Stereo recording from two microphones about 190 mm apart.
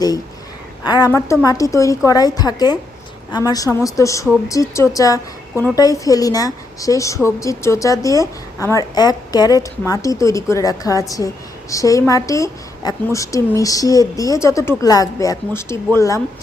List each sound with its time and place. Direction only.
0.9 s a woman's voice: 20° left (ahead or behind)